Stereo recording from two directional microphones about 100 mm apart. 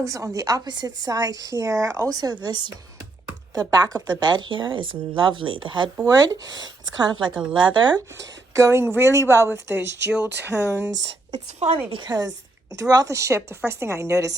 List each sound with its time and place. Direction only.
0.0 s a woman's voice: 35° right (ahead or behind)
2.4 s a woman's voice: 50° right (ahead or behind)
3.5 s a woman's voice: 40° right (ahead or behind); by 5.9 s 55° right (ahead or behind)
6.1 s a woman's voice: 40° right (ahead or behind)
8.2 s speech: 30° right (ahead or behind)
10.1 s speech: 10° right (ahead or behind)
11.3 s a woman's voice: 90° right
11.9 s a woman's voice: 50° right (ahead or behind); by 14.3 s 30° right (ahead or behind)